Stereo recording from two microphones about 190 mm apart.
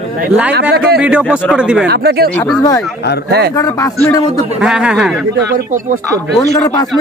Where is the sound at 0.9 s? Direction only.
5° right (ahead or behind).